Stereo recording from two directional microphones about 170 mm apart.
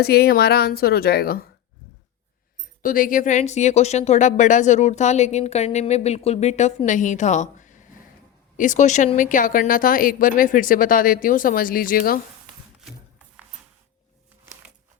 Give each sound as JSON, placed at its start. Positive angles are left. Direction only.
{"t": 0.0, "sound": "a woman's voice", "side_deg": 70}
{"t": 2.8, "sound": "a woman's voice", "side_deg": 55}